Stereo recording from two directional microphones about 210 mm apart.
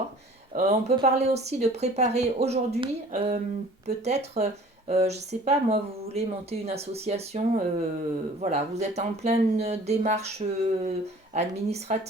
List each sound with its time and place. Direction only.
0.5 s speech: 30° right (ahead or behind)